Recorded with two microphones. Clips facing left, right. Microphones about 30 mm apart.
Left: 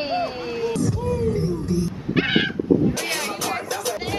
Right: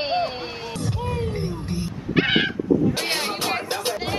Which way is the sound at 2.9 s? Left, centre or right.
Right.